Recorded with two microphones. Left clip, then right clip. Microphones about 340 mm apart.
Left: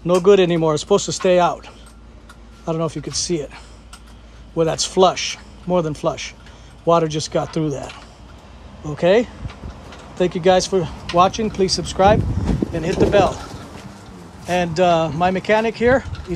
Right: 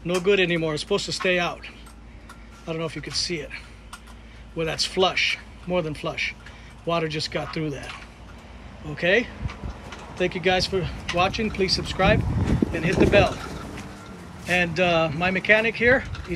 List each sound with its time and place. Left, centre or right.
0.0 s speech: centre
2.6 s speech: centre
4.7 s speech: centre
8.9 s speech: centre
10.3 s speech: centre
14.5 s speech: centre